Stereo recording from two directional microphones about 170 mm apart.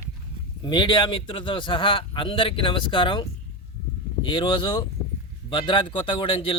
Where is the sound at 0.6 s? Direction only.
30° left (ahead or behind).